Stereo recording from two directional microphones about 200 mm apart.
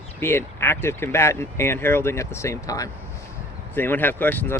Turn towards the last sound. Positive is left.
turn(degrees=10)  # may be behind; listen again after turning